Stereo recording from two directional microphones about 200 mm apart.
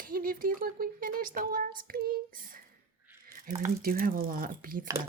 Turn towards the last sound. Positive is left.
turn(degrees=-45)  # may be behind; listen again after turning